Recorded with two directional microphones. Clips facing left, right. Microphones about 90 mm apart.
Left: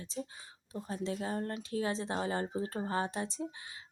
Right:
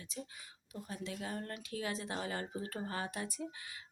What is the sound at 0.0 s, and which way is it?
A woman's voice, 30° left (ahead or behind).